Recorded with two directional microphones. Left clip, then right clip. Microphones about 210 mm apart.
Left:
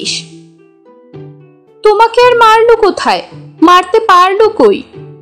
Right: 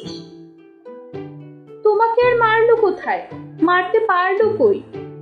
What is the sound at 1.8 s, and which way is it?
A woman's voice, 35° left (ahead or behind).